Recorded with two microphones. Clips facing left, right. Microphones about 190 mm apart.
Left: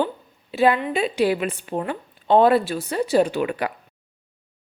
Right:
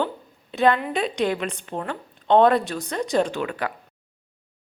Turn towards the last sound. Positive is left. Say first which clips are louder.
# left 3 dB
turn(degrees=15)  # may be behind; listen again after turning